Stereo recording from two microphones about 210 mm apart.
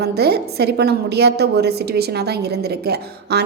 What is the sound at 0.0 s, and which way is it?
A woman's voice, 50° right (ahead or behind).